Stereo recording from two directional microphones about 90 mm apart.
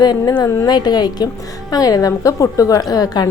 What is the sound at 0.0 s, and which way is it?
A woman's voice, 50° left (ahead or behind).